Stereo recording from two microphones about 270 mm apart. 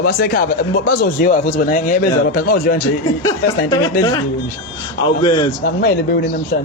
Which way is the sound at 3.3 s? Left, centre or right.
Centre.